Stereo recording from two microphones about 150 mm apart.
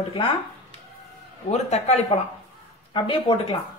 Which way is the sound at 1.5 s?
50° left (ahead or behind).